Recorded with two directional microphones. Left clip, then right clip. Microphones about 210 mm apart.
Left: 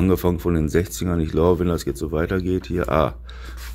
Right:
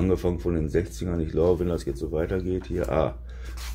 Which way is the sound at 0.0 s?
35° left (ahead or behind).